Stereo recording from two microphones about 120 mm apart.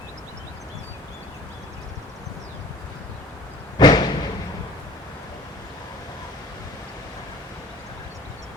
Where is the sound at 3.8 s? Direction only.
35° left (ahead or behind).